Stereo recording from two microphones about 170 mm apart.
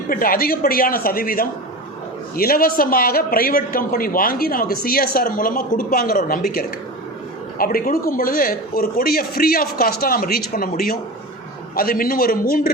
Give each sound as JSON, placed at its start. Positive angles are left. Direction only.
{"t": 0.1, "sound": "a man's voice", "side_deg": 55}